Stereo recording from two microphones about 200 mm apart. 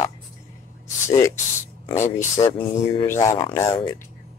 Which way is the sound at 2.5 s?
25° left (ahead or behind).